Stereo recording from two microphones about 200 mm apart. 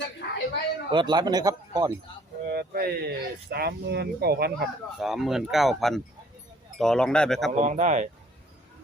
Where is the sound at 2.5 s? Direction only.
50° right (ahead or behind).